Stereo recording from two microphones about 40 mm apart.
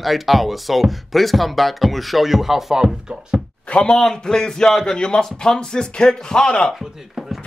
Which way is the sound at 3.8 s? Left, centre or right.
Centre.